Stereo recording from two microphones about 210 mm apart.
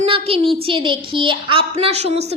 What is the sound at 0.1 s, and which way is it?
A woman's voice, 25° right (ahead or behind).